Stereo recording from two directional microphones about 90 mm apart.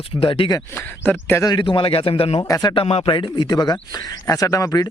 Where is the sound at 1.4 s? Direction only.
60° left (ahead or behind); by 2.3 s 90° left.